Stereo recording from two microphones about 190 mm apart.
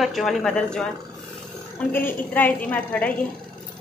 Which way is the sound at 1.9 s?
10° left (ahead or behind).